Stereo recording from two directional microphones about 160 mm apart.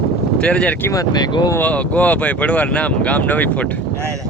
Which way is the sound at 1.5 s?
10° left (ahead or behind).